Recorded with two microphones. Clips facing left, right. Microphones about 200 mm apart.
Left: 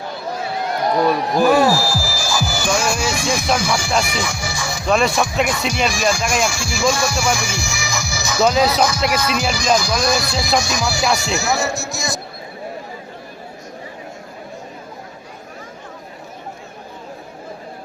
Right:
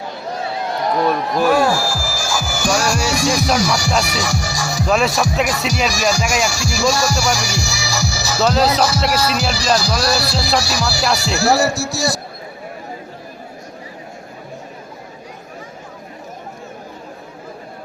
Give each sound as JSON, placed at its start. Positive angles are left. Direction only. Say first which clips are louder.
{"t": 1.0, "sound": "speech", "louder": "left 1 dB", "side_deg": 0}
{"t": 2.6, "sound": "music", "louder": "right 3 dB", "side_deg": -40}
{"t": 4.9, "sound": "speech", "louder": "even", "side_deg": -5}
{"t": 5.5, "sound": "music", "louder": "right 1 dB", "side_deg": -40}
{"t": 5.9, "sound": "speech", "louder": "right 1 dB", "side_deg": -40}
{"t": 8.8, "sound": "music", "louder": "right 1 dB", "side_deg": -35}
{"t": 11.3, "sound": "speech", "louder": "right 5 dB", "side_deg": -35}